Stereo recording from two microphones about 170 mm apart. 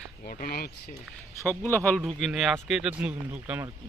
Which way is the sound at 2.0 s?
Centre (ahead or behind).